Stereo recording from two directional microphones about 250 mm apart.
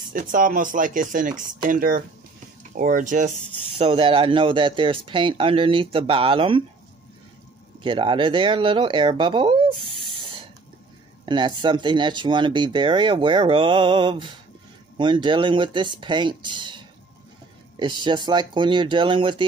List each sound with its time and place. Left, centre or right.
0.1 s speech: right
7.8 s speech: centre
11.2 s speech: centre